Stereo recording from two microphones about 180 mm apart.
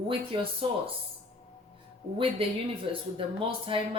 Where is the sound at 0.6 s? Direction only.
30° right (ahead or behind).